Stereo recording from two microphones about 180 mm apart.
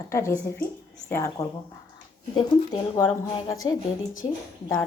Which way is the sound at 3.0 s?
20° left (ahead or behind).